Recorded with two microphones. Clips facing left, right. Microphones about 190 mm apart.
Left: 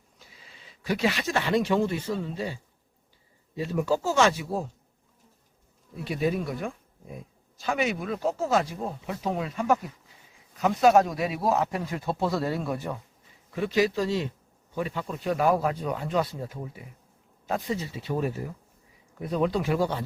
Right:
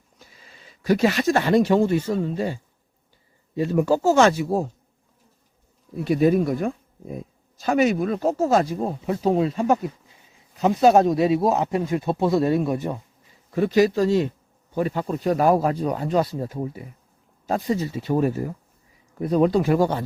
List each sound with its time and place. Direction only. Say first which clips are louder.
0.2 s speech: right 3 dB; 45° right (ahead or behind)
6.1 s speech: right 9 dB; 45° right (ahead or behind); by 13.0 s 20° right (ahead or behind)
13.5 s speech: right 6 dB; 45° right (ahead or behind)